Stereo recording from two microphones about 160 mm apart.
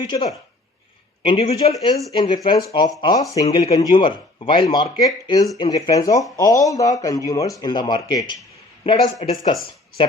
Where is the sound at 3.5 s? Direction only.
35° left (ahead or behind).